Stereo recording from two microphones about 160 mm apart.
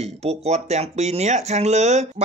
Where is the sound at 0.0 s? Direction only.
40° right (ahead or behind).